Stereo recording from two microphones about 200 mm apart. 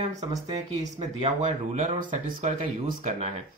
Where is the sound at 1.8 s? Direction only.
40° right (ahead or behind).